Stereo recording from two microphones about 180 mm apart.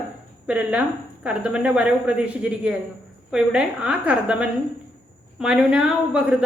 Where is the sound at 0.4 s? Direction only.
5° right (ahead or behind).